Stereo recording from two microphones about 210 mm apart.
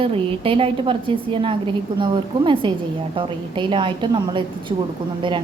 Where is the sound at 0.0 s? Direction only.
25° right (ahead or behind).